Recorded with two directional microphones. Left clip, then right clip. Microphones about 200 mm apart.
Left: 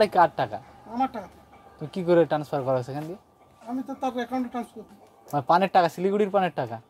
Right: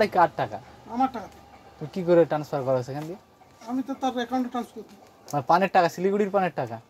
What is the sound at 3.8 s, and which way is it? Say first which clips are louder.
Speech: right 1 dB; 35° left (ahead or behind).